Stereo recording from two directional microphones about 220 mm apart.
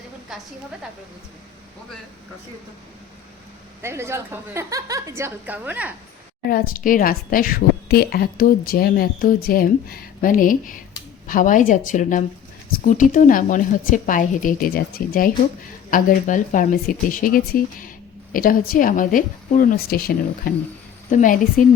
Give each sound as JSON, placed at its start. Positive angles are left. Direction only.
{"t": 3.8, "sound": "a woman's voice", "side_deg": -10}
{"t": 6.5, "sound": "a woman's voice", "side_deg": 40}